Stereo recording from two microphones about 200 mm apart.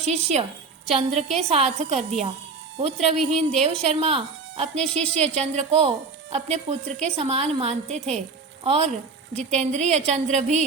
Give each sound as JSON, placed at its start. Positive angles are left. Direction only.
{"t": 0.0, "sound": "a woman's voice", "side_deg": -30}
{"t": 4.7, "sound": "speech", "side_deg": 5}
{"t": 5.1, "sound": "a woman's voice", "side_deg": -30}